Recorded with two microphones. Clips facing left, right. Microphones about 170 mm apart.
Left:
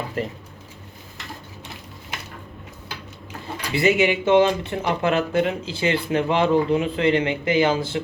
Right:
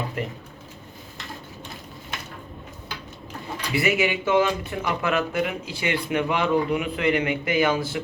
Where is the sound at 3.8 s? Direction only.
25° left (ahead or behind).